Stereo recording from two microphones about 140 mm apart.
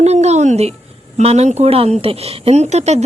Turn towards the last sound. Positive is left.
turn(degrees=-55)  # may be behind; listen again after turning